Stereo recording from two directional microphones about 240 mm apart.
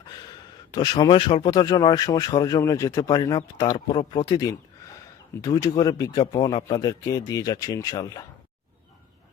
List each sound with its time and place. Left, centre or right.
0.7 s speech: centre